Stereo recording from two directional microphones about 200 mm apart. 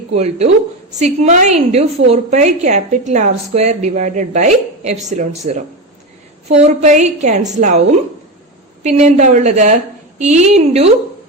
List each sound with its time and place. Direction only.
0.1 s a woman's voice: 35° right (ahead or behind)
6.6 s a woman's voice: 35° right (ahead or behind)